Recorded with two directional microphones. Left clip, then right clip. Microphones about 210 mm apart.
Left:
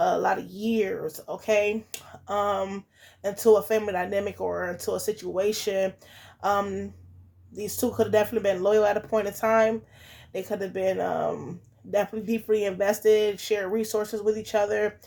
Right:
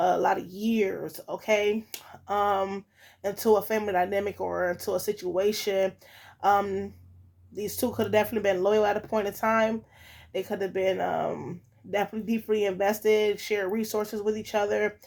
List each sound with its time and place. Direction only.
0.0 s speech: 40° right (ahead or behind)